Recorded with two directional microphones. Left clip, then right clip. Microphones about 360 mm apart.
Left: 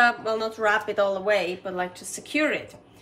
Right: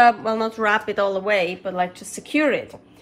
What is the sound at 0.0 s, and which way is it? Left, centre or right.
A woman's voice, centre.